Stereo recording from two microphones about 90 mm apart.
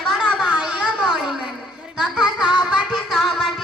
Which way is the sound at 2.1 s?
10° right (ahead or behind).